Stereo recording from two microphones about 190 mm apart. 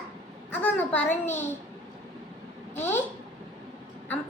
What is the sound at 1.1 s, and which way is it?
Speech, 40° left (ahead or behind).